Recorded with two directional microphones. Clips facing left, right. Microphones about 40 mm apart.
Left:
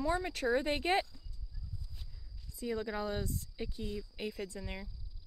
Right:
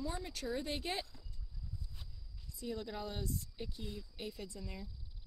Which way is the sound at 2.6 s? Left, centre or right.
Left.